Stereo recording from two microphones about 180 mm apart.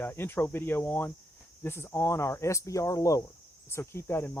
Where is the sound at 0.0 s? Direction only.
10° left (ahead or behind).